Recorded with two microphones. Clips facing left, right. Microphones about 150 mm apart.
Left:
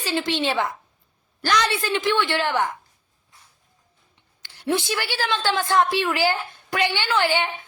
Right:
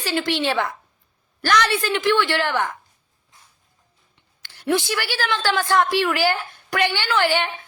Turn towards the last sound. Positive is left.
turn(degrees=20)  # may be behind; listen again after turning